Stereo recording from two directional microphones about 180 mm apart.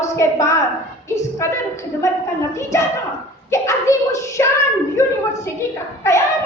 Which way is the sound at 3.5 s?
15° left (ahead or behind).